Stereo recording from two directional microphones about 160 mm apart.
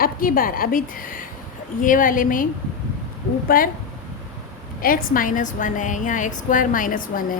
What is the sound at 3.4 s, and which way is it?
Speech, 60° left (ahead or behind).